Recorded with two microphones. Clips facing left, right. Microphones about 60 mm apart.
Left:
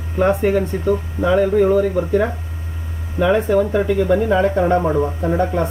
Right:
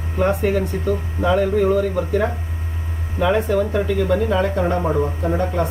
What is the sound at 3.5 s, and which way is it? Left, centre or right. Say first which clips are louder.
Speech: left 3 dB; centre.